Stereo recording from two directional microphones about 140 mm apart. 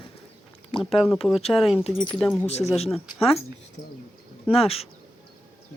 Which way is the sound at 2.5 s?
50° left (ahead or behind).